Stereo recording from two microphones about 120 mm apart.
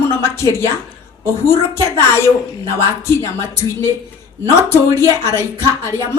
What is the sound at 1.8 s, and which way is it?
Speech, 20° left (ahead or behind).